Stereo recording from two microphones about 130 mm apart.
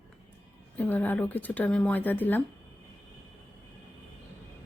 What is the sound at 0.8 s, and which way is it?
Speech, 15° left (ahead or behind).